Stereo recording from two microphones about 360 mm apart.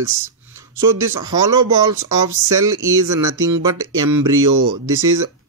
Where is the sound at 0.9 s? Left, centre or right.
Right.